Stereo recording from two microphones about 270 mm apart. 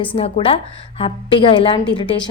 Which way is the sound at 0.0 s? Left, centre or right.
Centre.